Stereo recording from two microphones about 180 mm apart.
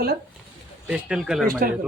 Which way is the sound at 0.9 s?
5° right (ahead or behind).